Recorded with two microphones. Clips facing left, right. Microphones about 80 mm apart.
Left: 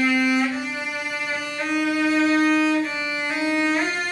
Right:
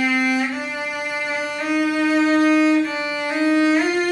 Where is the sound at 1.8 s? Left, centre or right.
Centre.